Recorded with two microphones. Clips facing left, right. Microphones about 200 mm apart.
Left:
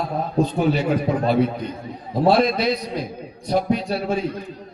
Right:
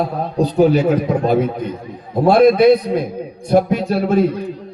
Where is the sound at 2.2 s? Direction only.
55° right (ahead or behind).